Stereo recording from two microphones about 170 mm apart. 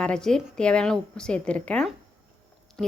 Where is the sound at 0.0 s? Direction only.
5° left (ahead or behind).